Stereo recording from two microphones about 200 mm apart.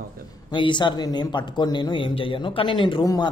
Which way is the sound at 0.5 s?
25° left (ahead or behind).